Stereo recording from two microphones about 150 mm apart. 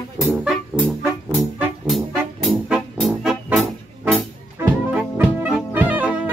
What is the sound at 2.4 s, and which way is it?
Music, centre (ahead or behind).